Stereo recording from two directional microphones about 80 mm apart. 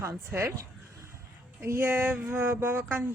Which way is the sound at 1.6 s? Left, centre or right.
Right.